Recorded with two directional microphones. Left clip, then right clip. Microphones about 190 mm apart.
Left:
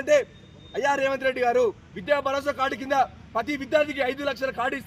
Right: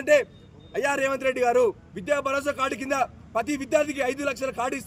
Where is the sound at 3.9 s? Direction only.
25° right (ahead or behind).